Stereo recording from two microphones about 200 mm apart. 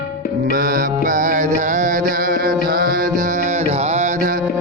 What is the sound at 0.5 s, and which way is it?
Music, 45° right (ahead or behind).